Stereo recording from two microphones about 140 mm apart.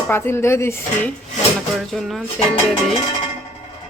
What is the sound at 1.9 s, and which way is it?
Speech, centre (ahead or behind).